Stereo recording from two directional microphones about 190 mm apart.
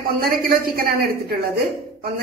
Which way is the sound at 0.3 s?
50° right (ahead or behind).